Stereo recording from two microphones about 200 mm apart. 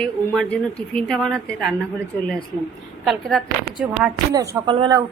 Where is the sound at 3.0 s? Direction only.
Centre (ahead or behind).